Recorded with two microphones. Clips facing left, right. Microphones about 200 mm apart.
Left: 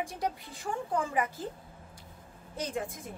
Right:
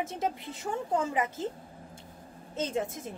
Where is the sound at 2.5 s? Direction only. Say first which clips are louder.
Right 4 dB; 25° right (ahead or behind).